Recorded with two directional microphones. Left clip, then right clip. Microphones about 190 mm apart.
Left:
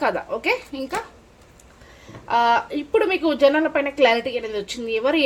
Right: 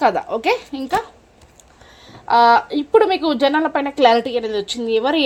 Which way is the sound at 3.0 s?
30° right (ahead or behind).